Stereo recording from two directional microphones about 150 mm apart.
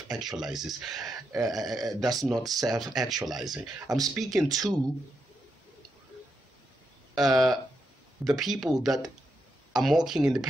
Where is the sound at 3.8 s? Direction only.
25° right (ahead or behind).